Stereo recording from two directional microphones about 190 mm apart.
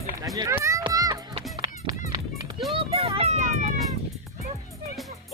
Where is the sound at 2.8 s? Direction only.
30° right (ahead or behind).